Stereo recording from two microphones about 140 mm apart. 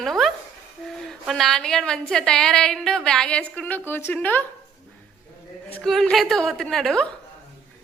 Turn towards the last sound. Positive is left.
turn(degrees=5)  # may be behind; listen again after turning